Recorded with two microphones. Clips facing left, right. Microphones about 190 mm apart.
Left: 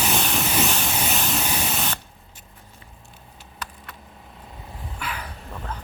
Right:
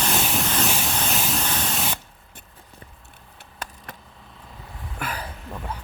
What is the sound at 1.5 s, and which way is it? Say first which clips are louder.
Spray: left 1 dB; 10° left (ahead or behind).